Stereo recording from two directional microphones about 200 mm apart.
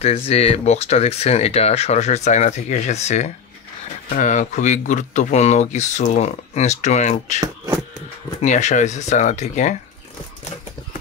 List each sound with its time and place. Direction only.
0.0 s speech: 30° left (ahead or behind)
7.3 s speech: 15° right (ahead or behind)
8.4 s speech: 35° left (ahead or behind)